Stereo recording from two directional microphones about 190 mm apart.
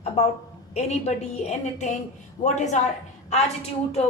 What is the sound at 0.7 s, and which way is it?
A woman's voice, 35° left (ahead or behind).